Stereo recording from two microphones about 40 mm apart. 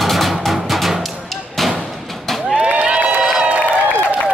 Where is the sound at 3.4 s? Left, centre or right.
Right.